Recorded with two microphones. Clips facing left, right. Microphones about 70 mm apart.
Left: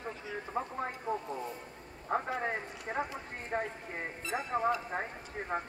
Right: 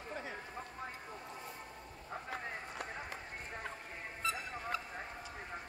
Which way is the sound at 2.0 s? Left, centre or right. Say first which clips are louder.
Left 11 dB; left.